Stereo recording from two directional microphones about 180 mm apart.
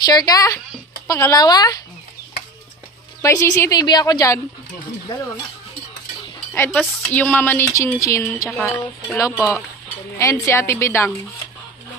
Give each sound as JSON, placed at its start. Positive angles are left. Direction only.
{"t": 0.0, "sound": "a woman's voice", "side_deg": 20}
{"t": 3.2, "sound": "a woman's voice", "side_deg": 15}
{"t": 6.5, "sound": "speech", "side_deg": 10}
{"t": 8.5, "sound": "speech", "side_deg": 5}